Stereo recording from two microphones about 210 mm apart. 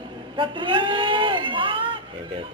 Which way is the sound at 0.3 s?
25° right (ahead or behind).